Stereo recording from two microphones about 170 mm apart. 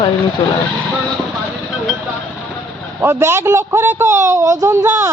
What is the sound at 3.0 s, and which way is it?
A man's voice, 15° right (ahead or behind).